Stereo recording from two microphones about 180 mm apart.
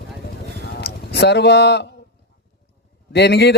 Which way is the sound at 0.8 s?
70° left (ahead or behind).